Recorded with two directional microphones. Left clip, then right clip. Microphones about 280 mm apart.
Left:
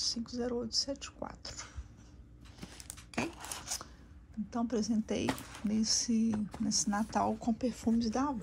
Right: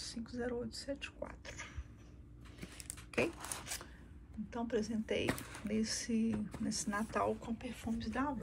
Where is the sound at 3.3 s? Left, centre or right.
Centre.